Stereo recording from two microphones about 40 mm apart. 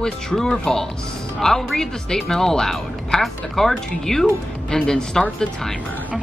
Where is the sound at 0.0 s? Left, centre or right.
Centre.